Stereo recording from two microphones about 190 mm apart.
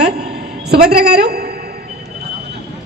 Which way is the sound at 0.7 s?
55° right (ahead or behind).